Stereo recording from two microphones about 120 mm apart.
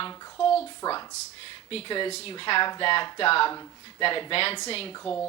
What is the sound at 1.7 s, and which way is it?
Speech, 50° left (ahead or behind).